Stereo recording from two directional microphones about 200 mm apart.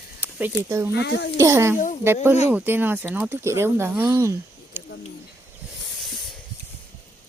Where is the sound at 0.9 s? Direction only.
60° left (ahead or behind).